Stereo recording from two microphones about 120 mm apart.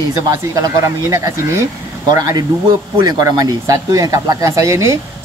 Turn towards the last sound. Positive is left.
turn(degrees=-25)  # may be behind; listen again after turning